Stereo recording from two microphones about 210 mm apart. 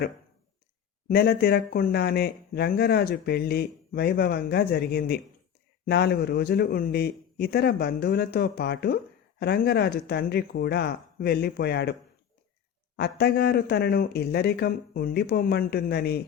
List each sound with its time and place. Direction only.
1.0 s speech: 45° left (ahead or behind)
13.0 s speech: 50° left (ahead or behind)